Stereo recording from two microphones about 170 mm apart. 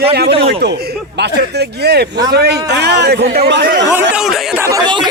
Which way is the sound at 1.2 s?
70° right (ahead or behind).